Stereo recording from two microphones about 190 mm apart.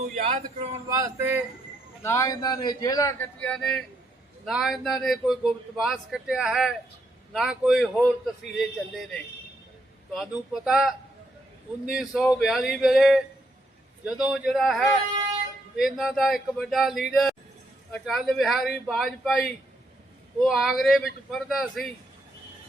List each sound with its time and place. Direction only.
0.1 s speech: 35° right (ahead or behind)
0.9 s speech: 20° right (ahead or behind)
2.0 s speech: 15° left (ahead or behind); by 9.0 s centre (ahead or behind)
10.2 s speech: centre (ahead or behind)